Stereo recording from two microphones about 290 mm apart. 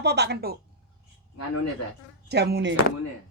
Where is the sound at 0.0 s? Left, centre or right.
Right.